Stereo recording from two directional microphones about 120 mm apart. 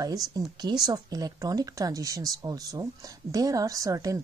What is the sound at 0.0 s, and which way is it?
Speech, 30° right (ahead or behind).